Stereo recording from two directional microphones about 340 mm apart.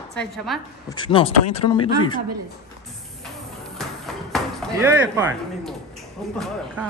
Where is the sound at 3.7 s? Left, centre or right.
Centre.